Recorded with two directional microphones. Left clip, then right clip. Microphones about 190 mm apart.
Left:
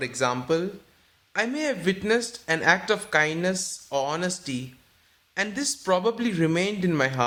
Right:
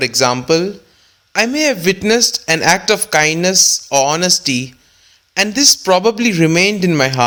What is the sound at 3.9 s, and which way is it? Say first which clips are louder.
Speech: right 14 dB; 35° right (ahead or behind).